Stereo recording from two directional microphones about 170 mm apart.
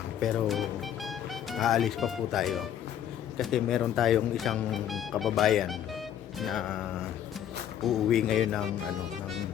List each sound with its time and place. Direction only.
0.2 s music: centre (ahead or behind)
3.3 s speech: centre (ahead or behind)
7.9 s speech: centre (ahead or behind)